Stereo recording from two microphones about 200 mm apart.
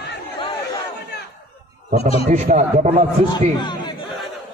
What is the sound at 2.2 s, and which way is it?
Speech, 35° right (ahead or behind).